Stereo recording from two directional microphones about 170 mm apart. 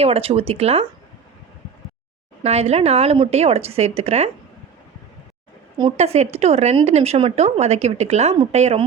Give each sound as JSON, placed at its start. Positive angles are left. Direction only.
{"t": 0.0, "sound": "speech", "side_deg": -35}
{"t": 2.4, "sound": "speech", "side_deg": -40}
{"t": 6.0, "sound": "speech", "side_deg": -40}